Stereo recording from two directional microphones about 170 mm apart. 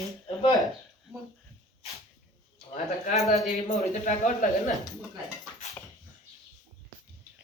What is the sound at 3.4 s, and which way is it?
A man's voice, 45° left (ahead or behind).